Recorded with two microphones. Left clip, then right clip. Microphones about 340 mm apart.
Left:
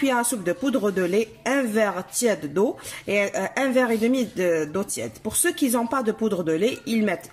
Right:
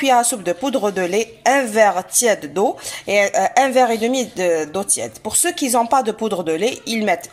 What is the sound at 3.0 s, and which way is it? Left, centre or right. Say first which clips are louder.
A woman's voice: right 8 dB; centre.